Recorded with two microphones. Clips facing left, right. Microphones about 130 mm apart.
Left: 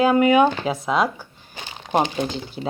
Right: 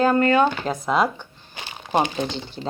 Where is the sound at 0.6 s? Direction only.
Centre (ahead or behind).